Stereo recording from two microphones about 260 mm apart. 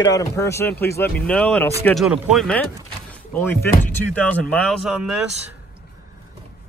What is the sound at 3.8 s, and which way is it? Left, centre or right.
Speech, centre.